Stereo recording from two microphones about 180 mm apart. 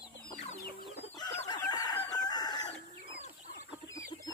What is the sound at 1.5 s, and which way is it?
Chicken, 20° left (ahead or behind).